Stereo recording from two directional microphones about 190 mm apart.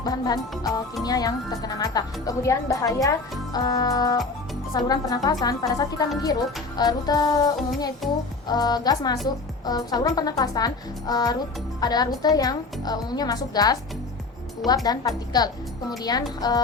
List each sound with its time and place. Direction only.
0.0 s speech: 20° left (ahead or behind)
14.8 s speech: 20° left (ahead or behind)